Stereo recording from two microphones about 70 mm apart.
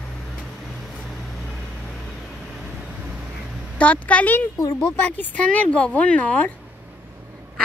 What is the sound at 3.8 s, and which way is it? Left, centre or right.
Speech, centre.